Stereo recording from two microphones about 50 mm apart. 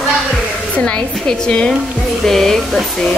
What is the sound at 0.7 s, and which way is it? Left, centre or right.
Speech, left.